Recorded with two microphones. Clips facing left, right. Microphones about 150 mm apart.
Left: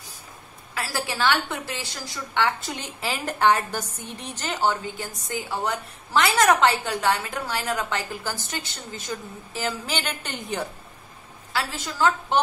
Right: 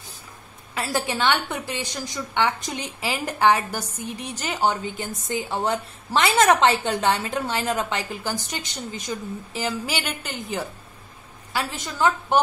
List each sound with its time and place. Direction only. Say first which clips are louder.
0.7 s a woman's voice: right 3 dB; 20° right (ahead or behind); by 10.7 s 5° right (ahead or behind)
11.5 s a woman's voice: right 1 dB; 20° right (ahead or behind)